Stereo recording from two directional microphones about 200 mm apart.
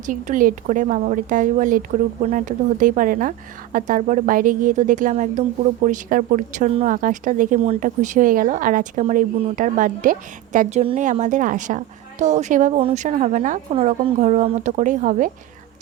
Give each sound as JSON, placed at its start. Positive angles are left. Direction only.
{"t": 0.0, "sound": "speech", "side_deg": -40}